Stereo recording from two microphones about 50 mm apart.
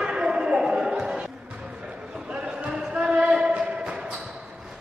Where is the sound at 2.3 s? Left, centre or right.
Right.